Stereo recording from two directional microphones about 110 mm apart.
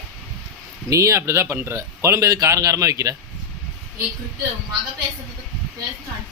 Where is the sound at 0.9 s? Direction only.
30° right (ahead or behind).